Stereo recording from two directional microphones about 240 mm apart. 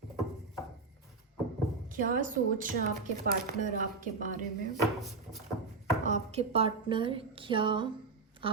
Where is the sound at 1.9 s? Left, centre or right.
Right.